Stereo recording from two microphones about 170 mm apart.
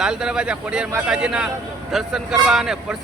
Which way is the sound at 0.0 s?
5° right (ahead or behind).